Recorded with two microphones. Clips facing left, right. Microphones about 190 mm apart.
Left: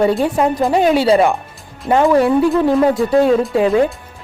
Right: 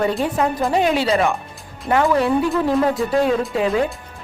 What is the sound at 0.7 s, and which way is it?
Speech, 35° left (ahead or behind).